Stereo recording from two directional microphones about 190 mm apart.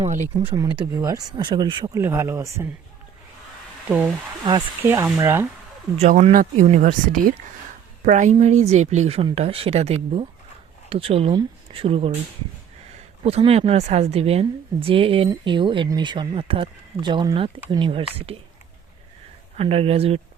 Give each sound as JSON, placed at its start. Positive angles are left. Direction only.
{"t": 0.0, "sound": "a woman's voice", "side_deg": -40}
{"t": 0.3, "sound": "a woman's voice", "side_deg": -20}
{"t": 3.8, "sound": "speech", "side_deg": -10}
{"t": 6.0, "sound": "a woman's voice", "side_deg": -35}
{"t": 13.2, "sound": "a woman's voice", "side_deg": -30}
{"t": 19.5, "sound": "a woman's voice", "side_deg": -30}